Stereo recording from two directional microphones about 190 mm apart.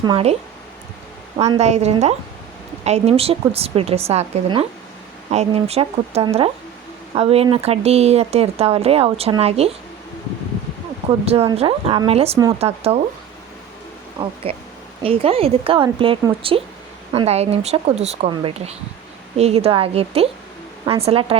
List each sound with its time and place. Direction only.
0.0 s a woman's voice: 30° right (ahead or behind)
1.5 s speech: 35° right (ahead or behind)
11.3 s speech: 30° right (ahead or behind)
14.5 s a woman's voice: 30° right (ahead or behind)